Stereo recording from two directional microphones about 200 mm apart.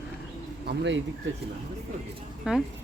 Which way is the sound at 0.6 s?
65° right (ahead or behind).